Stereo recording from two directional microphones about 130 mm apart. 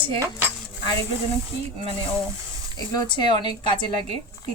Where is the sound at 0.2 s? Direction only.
20° right (ahead or behind).